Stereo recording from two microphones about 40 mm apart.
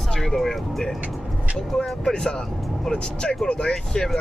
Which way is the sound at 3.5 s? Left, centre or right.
Centre.